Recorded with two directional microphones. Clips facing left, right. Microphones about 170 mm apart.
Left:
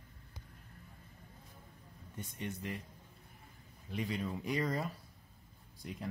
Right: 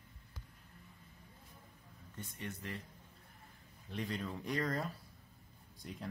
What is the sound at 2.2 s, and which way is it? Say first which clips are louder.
Speech: left 4 dB; 15° left (ahead or behind).